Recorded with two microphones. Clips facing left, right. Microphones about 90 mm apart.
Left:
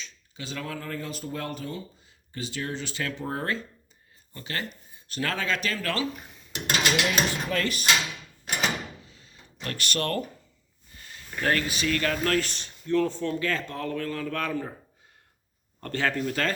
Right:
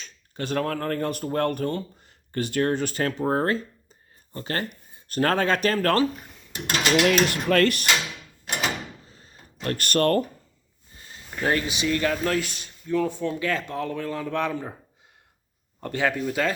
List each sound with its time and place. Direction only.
0.0 s speech: 55° right (ahead or behind)
7.1 s speech: 70° right (ahead or behind)
9.0 s door: 40° right (ahead or behind)
9.6 s speech: 45° right (ahead or behind)
10.9 s speech: 25° right (ahead or behind)
12.1 s speech: 10° right (ahead or behind)
15.8 s speech: 15° right (ahead or behind)